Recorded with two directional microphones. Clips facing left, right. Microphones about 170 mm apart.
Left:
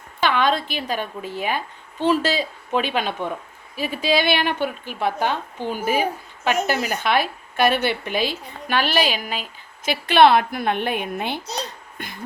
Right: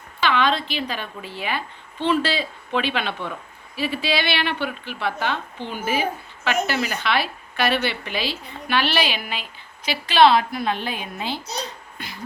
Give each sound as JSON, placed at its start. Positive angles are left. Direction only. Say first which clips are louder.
{"t": 0.2, "sound": "a woman's voice", "louder": "left 1 dB", "side_deg": 50}